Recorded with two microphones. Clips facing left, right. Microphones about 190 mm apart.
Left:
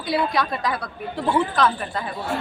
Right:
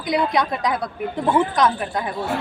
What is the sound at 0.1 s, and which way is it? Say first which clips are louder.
A woman's voice: right 2 dB; 20° right (ahead or behind).